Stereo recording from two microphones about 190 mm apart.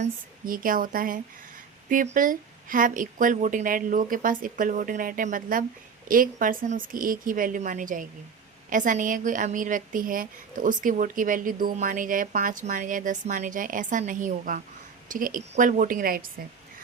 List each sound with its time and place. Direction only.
0.0 s speech: 45° right (ahead or behind)